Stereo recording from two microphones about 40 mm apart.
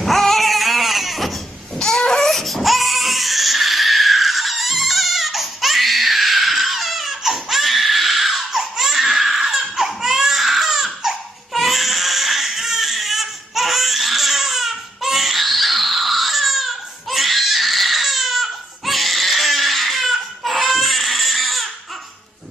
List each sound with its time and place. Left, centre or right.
0.0 s baby cry: centre
1.8 s a sound: centre
2.2 s baby cry: centre